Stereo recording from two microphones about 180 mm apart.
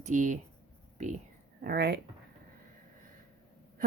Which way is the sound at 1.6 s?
60° right (ahead or behind).